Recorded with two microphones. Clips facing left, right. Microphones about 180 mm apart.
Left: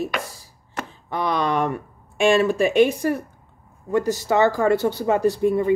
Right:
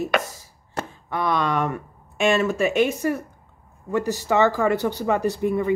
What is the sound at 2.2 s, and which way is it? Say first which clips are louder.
Speech: left 3 dB; 10° left (ahead or behind).